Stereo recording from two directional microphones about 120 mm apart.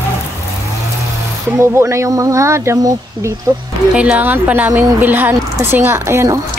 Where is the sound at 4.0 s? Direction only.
10° right (ahead or behind).